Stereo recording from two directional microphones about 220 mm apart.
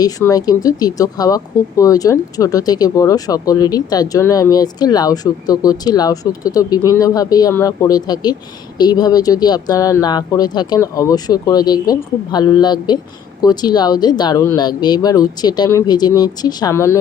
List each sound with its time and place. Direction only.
0.0 s speech: 15° left (ahead or behind)